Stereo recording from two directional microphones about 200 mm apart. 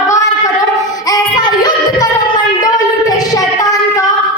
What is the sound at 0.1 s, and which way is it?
Child singing, 15° left (ahead or behind).